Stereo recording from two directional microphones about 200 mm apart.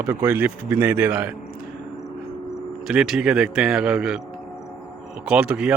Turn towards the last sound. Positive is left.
turn(degrees=-5)  # may be behind; listen again after turning